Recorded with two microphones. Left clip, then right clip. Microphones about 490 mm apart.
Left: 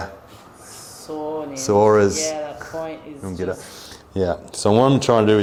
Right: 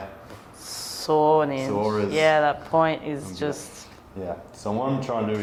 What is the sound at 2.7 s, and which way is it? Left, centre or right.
Speech, right.